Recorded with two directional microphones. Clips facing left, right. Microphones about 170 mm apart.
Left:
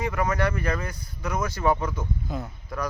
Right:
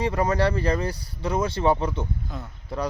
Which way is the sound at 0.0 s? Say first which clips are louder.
Right 3 dB; 30° right (ahead or behind).